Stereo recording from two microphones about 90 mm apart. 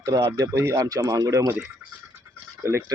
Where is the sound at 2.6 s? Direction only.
25° right (ahead or behind).